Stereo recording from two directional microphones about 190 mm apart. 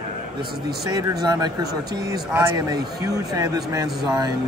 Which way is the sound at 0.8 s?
20° right (ahead or behind).